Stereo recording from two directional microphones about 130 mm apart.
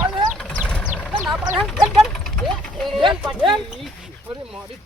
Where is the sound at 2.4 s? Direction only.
5° left (ahead or behind).